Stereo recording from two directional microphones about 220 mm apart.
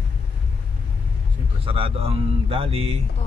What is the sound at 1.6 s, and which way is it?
Speech, 25° right (ahead or behind).